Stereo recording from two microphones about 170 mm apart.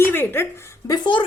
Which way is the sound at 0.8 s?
25° left (ahead or behind).